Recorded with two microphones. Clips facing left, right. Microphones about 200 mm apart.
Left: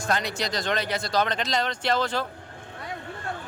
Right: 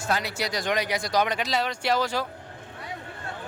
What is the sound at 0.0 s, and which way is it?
Speech, 5° right (ahead or behind).